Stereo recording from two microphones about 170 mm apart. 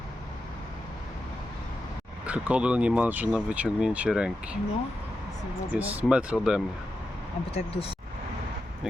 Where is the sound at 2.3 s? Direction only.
10° right (ahead or behind).